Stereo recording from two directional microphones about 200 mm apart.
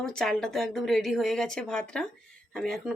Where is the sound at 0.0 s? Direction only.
5° left (ahead or behind).